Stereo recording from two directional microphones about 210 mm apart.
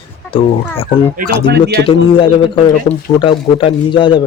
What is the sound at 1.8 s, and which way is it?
Speech, 25° left (ahead or behind).